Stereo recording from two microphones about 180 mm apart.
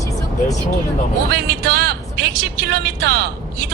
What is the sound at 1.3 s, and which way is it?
A woman's voice, 60° right (ahead or behind).